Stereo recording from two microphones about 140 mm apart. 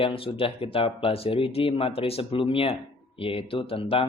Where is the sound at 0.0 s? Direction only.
40° left (ahead or behind).